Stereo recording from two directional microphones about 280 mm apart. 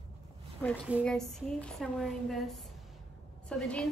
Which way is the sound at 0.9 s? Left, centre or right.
Centre.